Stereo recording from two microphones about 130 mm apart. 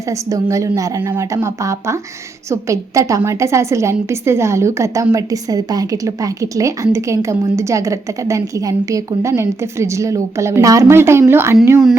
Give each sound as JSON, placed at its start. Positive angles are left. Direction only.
{"t": 0.1, "sound": "a woman's voice", "side_deg": -25}